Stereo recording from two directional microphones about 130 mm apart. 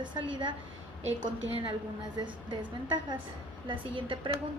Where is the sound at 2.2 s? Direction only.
35° right (ahead or behind).